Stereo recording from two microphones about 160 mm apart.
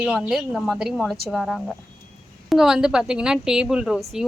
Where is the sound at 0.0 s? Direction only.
5° right (ahead or behind).